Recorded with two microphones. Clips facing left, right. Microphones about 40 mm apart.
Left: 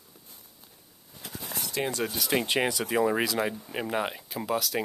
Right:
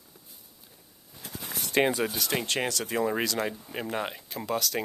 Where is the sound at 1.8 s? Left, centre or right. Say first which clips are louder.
Right 7 dB; right.